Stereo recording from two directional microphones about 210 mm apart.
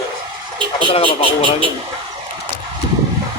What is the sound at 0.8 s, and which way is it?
Speech, 25° left (ahead or behind).